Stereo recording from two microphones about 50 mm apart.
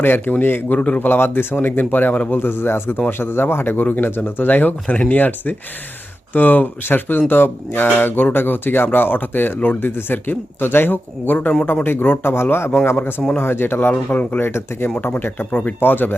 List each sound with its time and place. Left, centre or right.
0.0 s speech: left
2.3 s speech: left
12.3 s a man's voice: left
13.9 s speech: left